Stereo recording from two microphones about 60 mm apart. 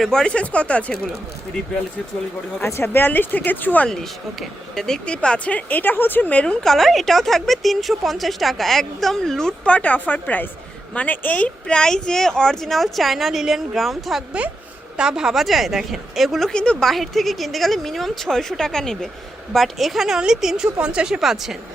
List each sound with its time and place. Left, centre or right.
0.0 s speech: centre
2.8 s speech: left
3.8 s speech: centre; by 6.4 s left
6.4 s speech: centre
6.7 s a woman's voice: centre
9.6 s speech: left; by 14.3 s centre
14.9 s a woman's voice: centre
16.5 s speech: centre
16.9 s a woman's voice: centre